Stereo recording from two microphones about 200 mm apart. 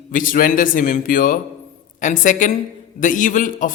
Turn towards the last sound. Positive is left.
turn(degrees=40)  # may be behind; listen again after turning